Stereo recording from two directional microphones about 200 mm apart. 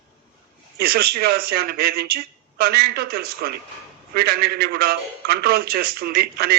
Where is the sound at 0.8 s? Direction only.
50° right (ahead or behind).